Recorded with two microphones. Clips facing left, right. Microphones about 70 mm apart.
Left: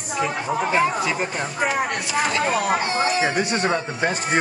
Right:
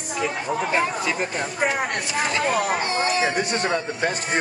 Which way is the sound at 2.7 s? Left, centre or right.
Left.